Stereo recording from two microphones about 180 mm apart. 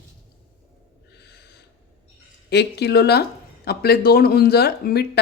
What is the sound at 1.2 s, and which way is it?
Snort, 65° left (ahead or behind).